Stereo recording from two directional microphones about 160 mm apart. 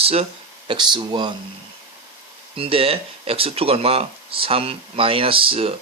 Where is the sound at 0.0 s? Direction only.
40° right (ahead or behind).